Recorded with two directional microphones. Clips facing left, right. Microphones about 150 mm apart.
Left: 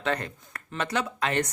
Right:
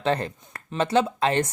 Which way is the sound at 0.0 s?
30° right (ahead or behind).